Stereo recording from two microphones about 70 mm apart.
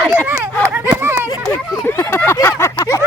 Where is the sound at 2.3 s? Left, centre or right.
Left.